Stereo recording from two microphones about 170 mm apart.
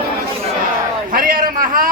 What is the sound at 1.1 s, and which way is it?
Speech, 55° right (ahead or behind).